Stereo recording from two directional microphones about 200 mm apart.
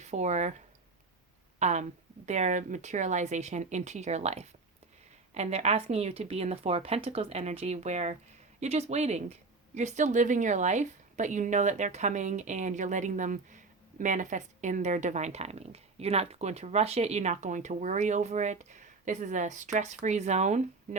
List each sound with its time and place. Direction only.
0.0 s speech: 35° right (ahead or behind)
1.5 s a woman's voice: 35° right (ahead or behind)